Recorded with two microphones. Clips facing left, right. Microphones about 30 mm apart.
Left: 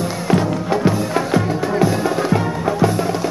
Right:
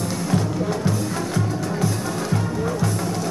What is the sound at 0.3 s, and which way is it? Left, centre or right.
Music, left.